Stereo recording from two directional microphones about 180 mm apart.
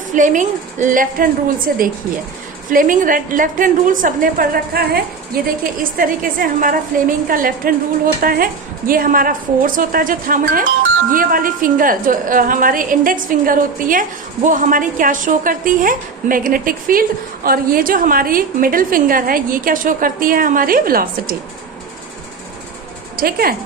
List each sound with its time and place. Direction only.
0.1 s a woman's voice: 45° right (ahead or behind)
23.1 s speech: 55° right (ahead or behind)